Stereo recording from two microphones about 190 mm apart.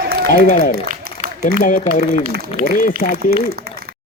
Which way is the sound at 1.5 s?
35° left (ahead or behind).